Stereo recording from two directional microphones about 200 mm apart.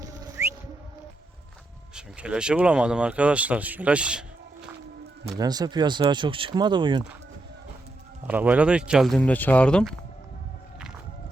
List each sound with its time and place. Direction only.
2.0 s speech: 5° right (ahead or behind)
5.4 s speech: 20° right (ahead or behind)
8.3 s speech: 5° right (ahead or behind)